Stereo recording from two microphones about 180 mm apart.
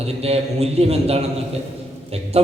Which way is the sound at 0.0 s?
35° right (ahead or behind).